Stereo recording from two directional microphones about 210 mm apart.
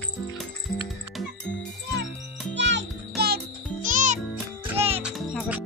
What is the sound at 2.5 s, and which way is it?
Music, 55° right (ahead or behind).